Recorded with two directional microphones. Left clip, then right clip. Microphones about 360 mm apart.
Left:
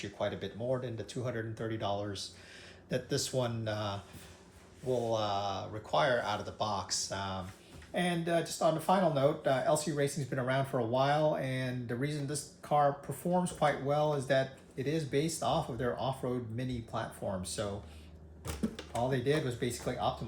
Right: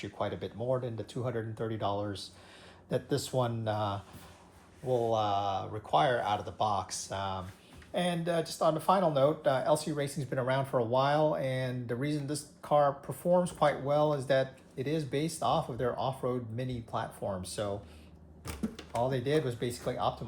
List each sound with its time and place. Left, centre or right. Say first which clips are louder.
0.0 s speech: even; centre
18.4 s a sound: left 1 dB; centre
19.0 s speech: right 1 dB; centre